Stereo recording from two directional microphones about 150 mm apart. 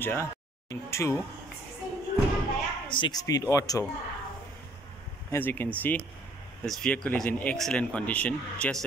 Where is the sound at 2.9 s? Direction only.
30° left (ahead or behind).